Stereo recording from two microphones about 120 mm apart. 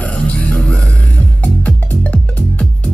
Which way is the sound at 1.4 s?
10° left (ahead or behind).